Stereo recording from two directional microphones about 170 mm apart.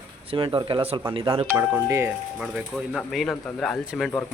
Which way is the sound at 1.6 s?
10° right (ahead or behind).